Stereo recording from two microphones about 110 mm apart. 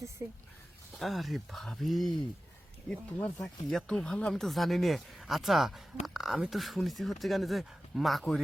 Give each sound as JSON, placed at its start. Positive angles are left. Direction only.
{"t": 0.2, "sound": "speech", "side_deg": -20}
{"t": 0.9, "sound": "speech", "side_deg": 0}
{"t": 2.9, "sound": "speech", "side_deg": 15}
{"t": 3.4, "sound": "speech", "side_deg": 5}